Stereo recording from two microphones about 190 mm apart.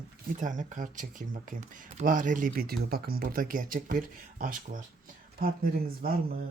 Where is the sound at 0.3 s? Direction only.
40° right (ahead or behind).